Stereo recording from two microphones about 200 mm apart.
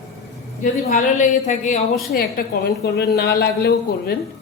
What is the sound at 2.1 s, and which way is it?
A woman's voice, 50° left (ahead or behind).